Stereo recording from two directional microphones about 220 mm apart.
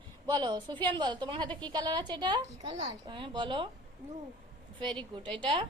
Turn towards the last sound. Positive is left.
turn(degrees=-20)  # may be behind; listen again after turning